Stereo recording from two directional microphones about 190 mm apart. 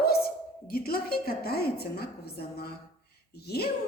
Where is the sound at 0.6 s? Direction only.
50° left (ahead or behind).